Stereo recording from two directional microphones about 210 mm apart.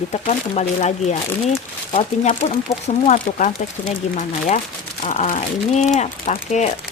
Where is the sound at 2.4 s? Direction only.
30° left (ahead or behind).